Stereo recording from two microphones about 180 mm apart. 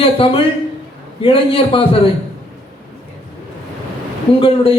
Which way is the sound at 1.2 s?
30° left (ahead or behind).